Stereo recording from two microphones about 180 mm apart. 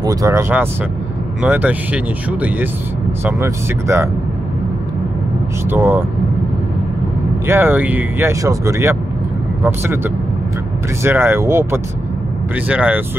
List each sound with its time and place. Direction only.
0.0 s speech: 20° right (ahead or behind)
3.3 s speech: 15° right (ahead or behind)
5.7 s speech: 10° right (ahead or behind)
7.4 s speech: 10° right (ahead or behind)